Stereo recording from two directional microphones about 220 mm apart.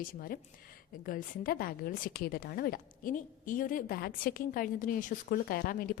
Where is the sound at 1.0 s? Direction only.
40° left (ahead or behind).